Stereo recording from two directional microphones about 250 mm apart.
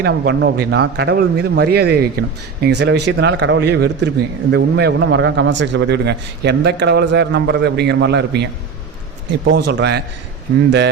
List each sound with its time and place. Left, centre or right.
0.0 s a man's voice: right